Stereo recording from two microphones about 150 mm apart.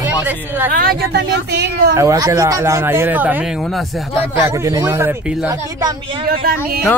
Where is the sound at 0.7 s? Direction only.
85° right.